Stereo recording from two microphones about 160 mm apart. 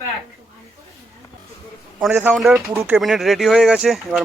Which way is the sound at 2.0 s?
10° right (ahead or behind).